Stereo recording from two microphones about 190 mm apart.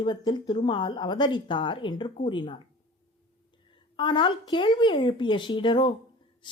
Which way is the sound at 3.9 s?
25° left (ahead or behind).